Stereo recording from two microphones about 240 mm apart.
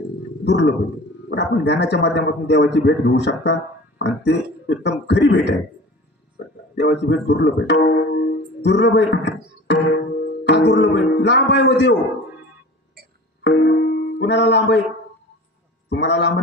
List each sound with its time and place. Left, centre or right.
0.5 s a man's voice: left
6.8 s a man's voice: left
13.4 s music: left
15.9 s a man's voice: left